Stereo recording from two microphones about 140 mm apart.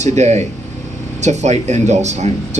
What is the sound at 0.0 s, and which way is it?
Speech, 55° right (ahead or behind).